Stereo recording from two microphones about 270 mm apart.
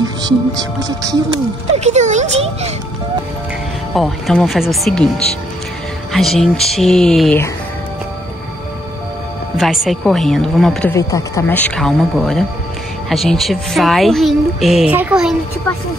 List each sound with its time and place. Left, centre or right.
0.0 s speech: centre
1.8 s speech: right
3.9 s speech: centre
9.6 s speech: centre